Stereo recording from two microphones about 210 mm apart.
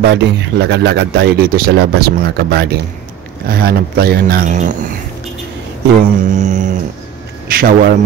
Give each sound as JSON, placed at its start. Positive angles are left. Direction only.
{"t": 0.0, "sound": "speech", "side_deg": -55}
{"t": 6.2, "sound": "mantra", "side_deg": -35}
{"t": 7.4, "sound": "a man's voice", "side_deg": -45}